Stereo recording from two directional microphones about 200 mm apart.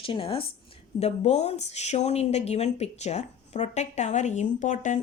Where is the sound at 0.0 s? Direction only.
25° left (ahead or behind).